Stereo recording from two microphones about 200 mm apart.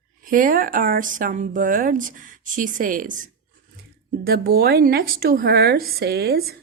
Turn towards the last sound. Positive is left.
turn(degrees=-50)  # may be behind; listen again after turning